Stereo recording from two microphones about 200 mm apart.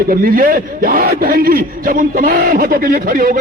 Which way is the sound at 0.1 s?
45° right (ahead or behind).